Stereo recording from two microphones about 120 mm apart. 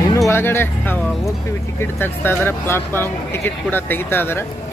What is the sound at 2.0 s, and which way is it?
Speech, 20° left (ahead or behind).